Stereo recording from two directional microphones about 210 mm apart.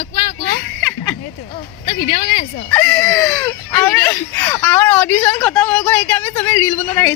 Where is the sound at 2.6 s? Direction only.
5° left (ahead or behind).